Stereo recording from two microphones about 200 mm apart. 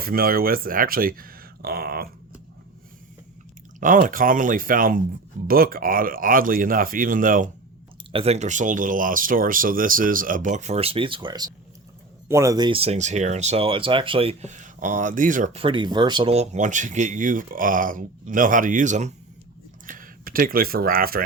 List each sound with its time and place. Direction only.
0.0 s speech: 50° right (ahead or behind)
3.8 s speech: 40° right (ahead or behind)
8.1 s speech: 30° right (ahead or behind); by 21.2 s 45° right (ahead or behind)